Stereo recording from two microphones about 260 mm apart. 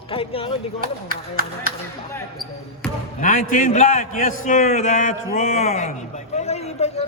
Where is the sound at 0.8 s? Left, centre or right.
Right.